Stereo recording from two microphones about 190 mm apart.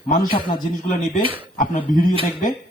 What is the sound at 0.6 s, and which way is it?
Speech, 45° left (ahead or behind).